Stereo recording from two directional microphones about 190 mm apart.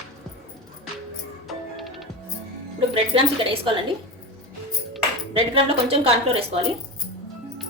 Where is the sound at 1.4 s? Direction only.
Centre (ahead or behind).